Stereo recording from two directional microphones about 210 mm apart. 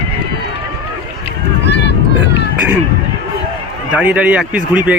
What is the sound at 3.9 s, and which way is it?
Speech, 5° right (ahead or behind).